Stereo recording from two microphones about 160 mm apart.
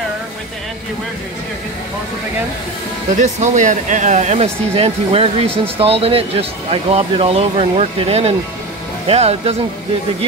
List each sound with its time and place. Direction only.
3.2 s speech: 50° right (ahead or behind)